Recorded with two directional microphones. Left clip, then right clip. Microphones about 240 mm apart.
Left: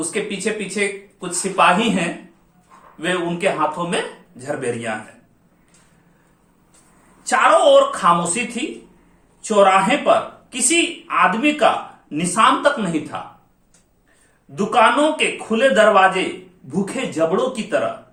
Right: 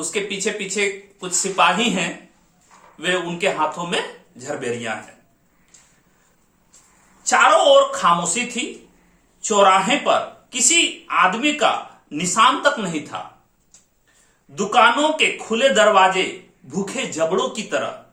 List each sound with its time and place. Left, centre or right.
0.0 s speech: centre
7.2 s speech: centre
14.5 s speech: centre